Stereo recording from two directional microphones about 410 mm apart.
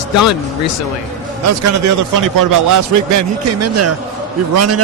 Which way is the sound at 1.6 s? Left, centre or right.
Right.